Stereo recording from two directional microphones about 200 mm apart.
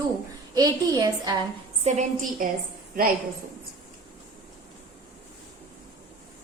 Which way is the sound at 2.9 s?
45° right (ahead or behind).